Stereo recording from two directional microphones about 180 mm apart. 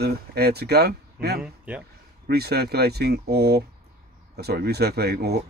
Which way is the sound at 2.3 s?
65° right (ahead or behind).